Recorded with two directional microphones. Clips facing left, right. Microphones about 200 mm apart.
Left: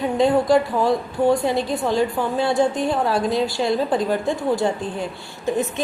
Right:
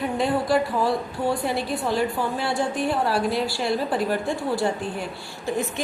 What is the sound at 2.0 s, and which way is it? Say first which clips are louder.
Speech: left 4 dB; 20° left (ahead or behind).